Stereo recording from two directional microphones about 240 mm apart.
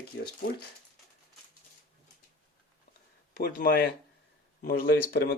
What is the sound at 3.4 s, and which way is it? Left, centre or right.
Speech, left.